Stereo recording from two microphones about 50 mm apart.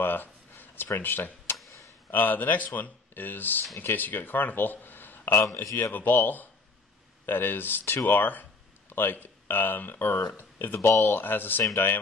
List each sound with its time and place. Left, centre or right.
0.0 s a sound: left
0.9 s speech: left
5.8 s speech: left